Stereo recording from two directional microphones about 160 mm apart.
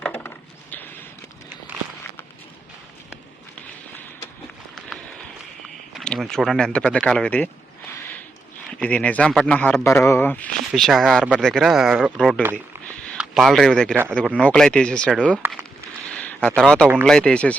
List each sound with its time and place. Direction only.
0.0 s wood: 10° left (ahead or behind)
1.7 s a sound: 10° right (ahead or behind)
5.6 s a sound: centre (ahead or behind)
8.8 s speech: 10° left (ahead or behind)
10.7 s speech: centre (ahead or behind)
12.4 s speech: 15° right (ahead or behind)
13.1 s speech: centre (ahead or behind)
15.4 s speech: 10° right (ahead or behind)
16.1 s a sound: 10° left (ahead or behind)
16.6 s speech: 5° left (ahead or behind)